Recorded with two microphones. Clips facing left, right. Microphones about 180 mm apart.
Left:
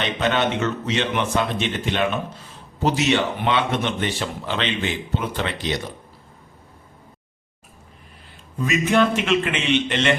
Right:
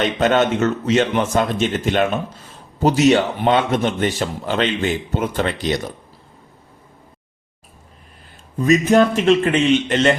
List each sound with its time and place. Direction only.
0.0 s a man's voice: 45° right (ahead or behind)
8.5 s speech: 40° right (ahead or behind)